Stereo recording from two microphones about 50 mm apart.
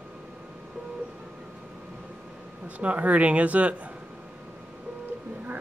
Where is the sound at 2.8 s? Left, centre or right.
Right.